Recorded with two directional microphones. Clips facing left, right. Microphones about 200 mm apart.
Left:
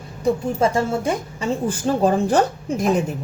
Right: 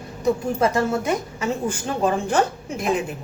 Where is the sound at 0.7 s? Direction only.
30° left (ahead or behind).